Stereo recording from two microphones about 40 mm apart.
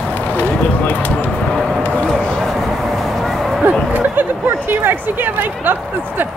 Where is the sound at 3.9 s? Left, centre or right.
Right.